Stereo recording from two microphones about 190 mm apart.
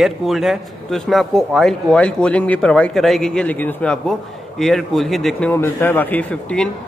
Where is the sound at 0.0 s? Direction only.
Centre (ahead or behind).